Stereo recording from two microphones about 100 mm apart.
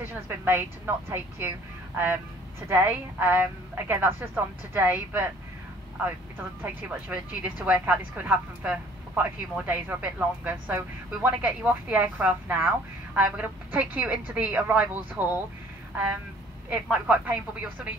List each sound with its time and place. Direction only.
0.0 s a woman's voice: 20° right (ahead or behind)
2.7 s a woman's voice: 20° right (ahead or behind)
6.6 s speech: 15° right (ahead or behind)
16.6 s speech: 10° right (ahead or behind)